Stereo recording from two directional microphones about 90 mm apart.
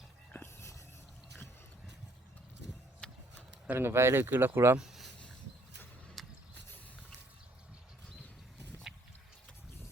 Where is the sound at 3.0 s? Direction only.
10° left (ahead or behind).